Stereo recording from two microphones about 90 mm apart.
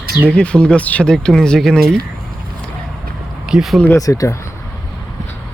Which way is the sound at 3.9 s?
40° left (ahead or behind).